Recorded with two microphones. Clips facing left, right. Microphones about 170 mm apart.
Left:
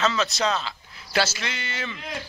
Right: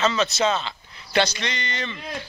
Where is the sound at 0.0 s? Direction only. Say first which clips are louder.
Right 2 dB; centre (ahead or behind).